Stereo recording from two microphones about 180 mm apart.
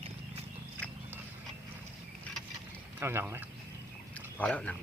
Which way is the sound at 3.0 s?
15° right (ahead or behind).